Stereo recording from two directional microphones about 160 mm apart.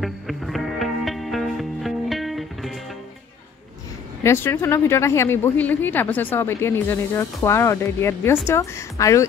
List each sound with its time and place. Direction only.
0.0 s music: centre (ahead or behind)
4.2 s a woman's voice: 15° left (ahead or behind)